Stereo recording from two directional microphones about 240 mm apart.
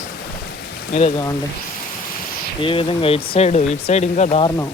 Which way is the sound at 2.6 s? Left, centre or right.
Left.